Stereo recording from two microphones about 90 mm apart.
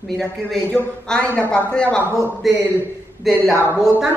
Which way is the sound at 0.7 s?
15° left (ahead or behind).